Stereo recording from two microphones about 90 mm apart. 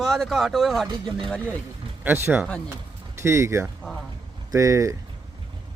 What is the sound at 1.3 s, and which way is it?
Speech, 15° left (ahead or behind).